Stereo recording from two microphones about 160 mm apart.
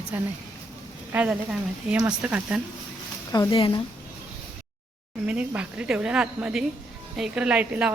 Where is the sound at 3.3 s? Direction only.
25° left (ahead or behind).